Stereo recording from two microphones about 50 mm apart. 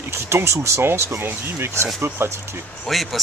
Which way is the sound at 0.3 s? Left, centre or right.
Right.